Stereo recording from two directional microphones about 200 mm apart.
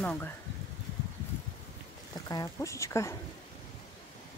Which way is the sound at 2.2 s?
15° left (ahead or behind).